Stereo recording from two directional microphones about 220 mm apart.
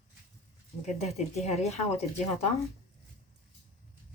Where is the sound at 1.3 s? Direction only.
30° left (ahead or behind).